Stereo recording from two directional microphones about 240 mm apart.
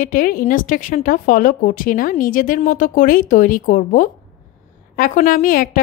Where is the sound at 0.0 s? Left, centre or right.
Left.